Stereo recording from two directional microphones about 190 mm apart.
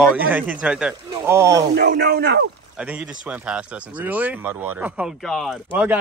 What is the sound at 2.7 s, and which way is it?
Speech, 5° right (ahead or behind).